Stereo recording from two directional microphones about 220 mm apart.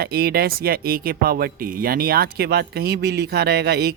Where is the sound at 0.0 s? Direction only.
45° right (ahead or behind).